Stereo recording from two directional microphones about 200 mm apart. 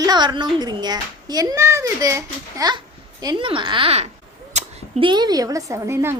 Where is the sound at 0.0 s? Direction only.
20° right (ahead or behind).